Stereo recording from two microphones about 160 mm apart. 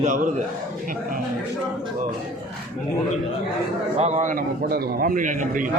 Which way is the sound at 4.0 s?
50° right (ahead or behind).